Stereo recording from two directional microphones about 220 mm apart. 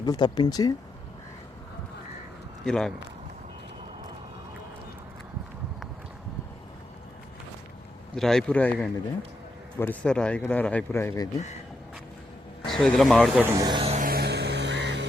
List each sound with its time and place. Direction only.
0.0 s speech: 20° left (ahead or behind)
2.6 s speech: centre (ahead or behind)
8.1 s speech: centre (ahead or behind)
12.6 s speech: centre (ahead or behind)
13.6 s music: 20° right (ahead or behind); by 15.0 s 50° right (ahead or behind)